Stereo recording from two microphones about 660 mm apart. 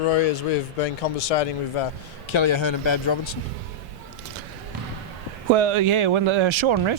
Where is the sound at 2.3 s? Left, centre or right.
Left.